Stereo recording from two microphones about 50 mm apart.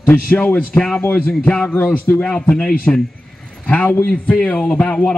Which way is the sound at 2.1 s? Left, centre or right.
Left.